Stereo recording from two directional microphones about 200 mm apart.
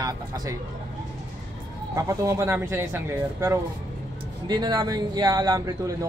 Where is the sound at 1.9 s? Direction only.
15° right (ahead or behind).